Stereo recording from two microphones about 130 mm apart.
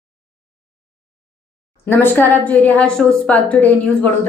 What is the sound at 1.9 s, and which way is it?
A man's voice, 15° left (ahead or behind).